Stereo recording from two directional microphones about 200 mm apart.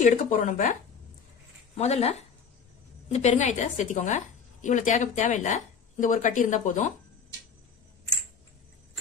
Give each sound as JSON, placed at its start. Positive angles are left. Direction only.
{"t": 0.0, "sound": "a woman's voice", "side_deg": 40}
{"t": 1.8, "sound": "a woman's voice", "side_deg": 35}